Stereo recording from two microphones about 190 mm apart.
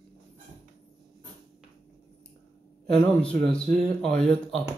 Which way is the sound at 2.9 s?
5° left (ahead or behind).